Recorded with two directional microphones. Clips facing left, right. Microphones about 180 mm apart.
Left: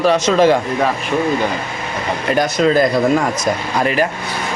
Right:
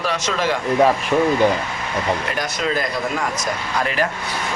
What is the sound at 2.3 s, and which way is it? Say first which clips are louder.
Speech: left 9 dB; 30° left (ahead or behind).